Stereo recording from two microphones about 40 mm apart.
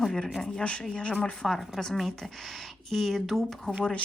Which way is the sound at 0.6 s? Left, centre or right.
Left.